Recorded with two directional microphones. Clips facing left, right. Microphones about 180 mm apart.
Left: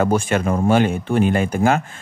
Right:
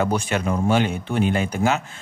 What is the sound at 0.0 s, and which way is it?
Speech, 50° left (ahead or behind).